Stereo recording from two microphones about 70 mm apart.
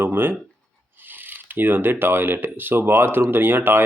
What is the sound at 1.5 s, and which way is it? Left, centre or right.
Speech, right.